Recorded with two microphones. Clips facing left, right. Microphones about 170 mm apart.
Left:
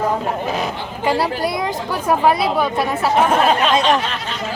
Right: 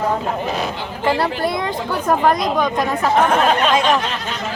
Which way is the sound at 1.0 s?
10° left (ahead or behind).